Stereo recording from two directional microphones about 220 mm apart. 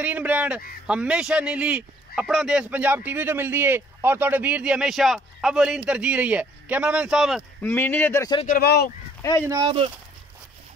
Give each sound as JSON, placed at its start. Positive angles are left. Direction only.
{"t": 0.0, "sound": "a sound", "side_deg": -5}
{"t": 0.8, "sound": "speech", "side_deg": -5}
{"t": 7.6, "sound": "speech", "side_deg": 10}
{"t": 8.5, "sound": "speech", "side_deg": 45}
{"t": 9.5, "sound": "speech", "side_deg": -20}